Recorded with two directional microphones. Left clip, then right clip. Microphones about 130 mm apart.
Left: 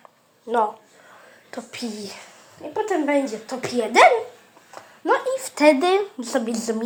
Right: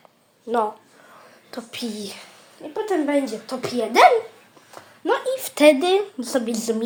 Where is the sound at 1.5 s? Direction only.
5° right (ahead or behind).